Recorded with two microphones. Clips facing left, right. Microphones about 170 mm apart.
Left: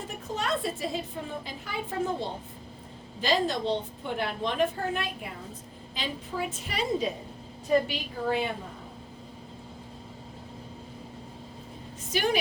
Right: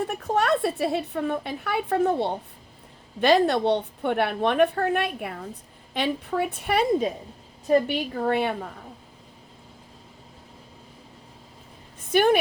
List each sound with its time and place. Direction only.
0.0 s a woman's voice: 65° right (ahead or behind)
12.1 s a woman's voice: 55° right (ahead or behind)